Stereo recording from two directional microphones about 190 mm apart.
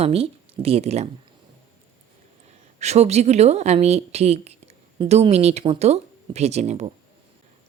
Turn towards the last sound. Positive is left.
turn(degrees=-35)  # may be behind; listen again after turning